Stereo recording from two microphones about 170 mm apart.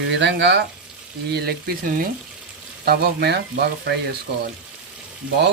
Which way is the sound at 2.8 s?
70° right (ahead or behind).